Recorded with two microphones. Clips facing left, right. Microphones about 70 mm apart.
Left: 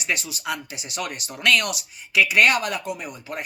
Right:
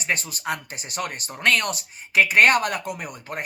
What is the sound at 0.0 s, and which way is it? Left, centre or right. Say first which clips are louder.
Speech: right 1 dB; right.